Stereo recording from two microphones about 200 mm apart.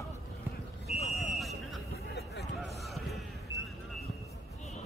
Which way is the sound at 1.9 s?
55° left (ahead or behind).